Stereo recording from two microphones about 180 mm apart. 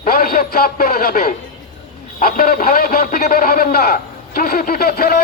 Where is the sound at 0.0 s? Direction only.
55° left (ahead or behind).